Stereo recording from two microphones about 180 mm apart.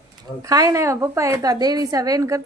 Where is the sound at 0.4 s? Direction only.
20° right (ahead or behind).